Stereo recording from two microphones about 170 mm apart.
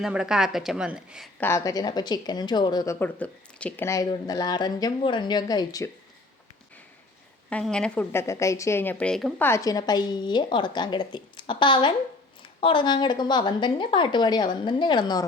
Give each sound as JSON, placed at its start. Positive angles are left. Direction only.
{"t": 0.0, "sound": "a woman's voice", "side_deg": -5}
{"t": 1.4, "sound": "speech", "side_deg": 15}
{"t": 7.5, "sound": "a woman's voice", "side_deg": 5}
{"t": 9.5, "sound": "speech", "side_deg": 20}